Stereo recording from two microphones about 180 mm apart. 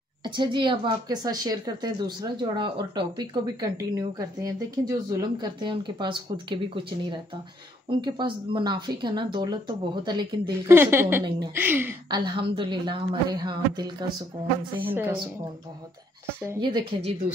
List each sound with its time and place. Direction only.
0.2 s a woman's voice: 25° right (ahead or behind)
10.7 s a woman's voice: 15° right (ahead or behind)
12.1 s a woman's voice: 25° right (ahead or behind)
14.8 s a woman's voice: 10° right (ahead or behind)
16.4 s a woman's voice: 25° right (ahead or behind)